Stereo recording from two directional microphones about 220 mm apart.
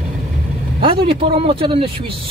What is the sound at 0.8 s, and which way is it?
Speech, 25° right (ahead or behind).